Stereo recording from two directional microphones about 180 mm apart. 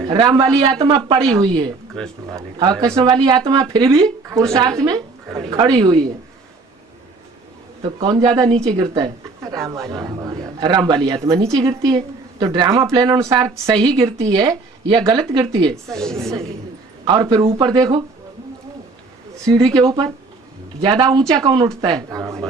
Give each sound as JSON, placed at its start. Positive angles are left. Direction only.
{"t": 0.1, "sound": "a woman's voice", "side_deg": -20}
{"t": 2.0, "sound": "a woman's voice", "side_deg": 5}
{"t": 2.8, "sound": "a woman's voice", "side_deg": -20}
{"t": 7.9, "sound": "a woman's voice", "side_deg": -25}
{"t": 15.7, "sound": "a woman's voice", "side_deg": 5}
{"t": 17.1, "sound": "a woman's voice", "side_deg": -25}
{"t": 19.7, "sound": "a woman's voice", "side_deg": -20}